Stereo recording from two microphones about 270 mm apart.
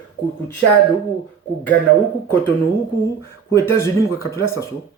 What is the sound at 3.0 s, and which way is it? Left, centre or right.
Speech, centre.